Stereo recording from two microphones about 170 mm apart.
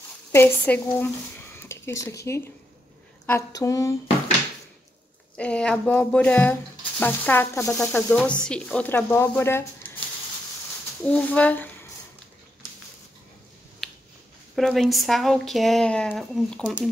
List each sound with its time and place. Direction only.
0.3 s speech: 10° left (ahead or behind)
3.3 s a sound: 15° left (ahead or behind)
5.4 s speech: 5° left (ahead or behind)
11.0 s speech: 5° left (ahead or behind)
14.5 s speech: centre (ahead or behind)